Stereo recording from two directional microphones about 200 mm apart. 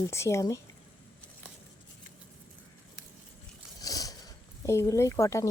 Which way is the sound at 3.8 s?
20° left (ahead or behind).